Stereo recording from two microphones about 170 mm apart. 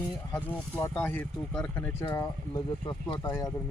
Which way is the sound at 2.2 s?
25° left (ahead or behind).